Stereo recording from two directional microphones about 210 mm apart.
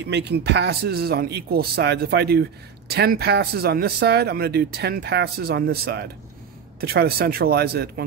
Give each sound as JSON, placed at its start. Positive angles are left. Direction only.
{"t": 0.0, "sound": "speech", "side_deg": -55}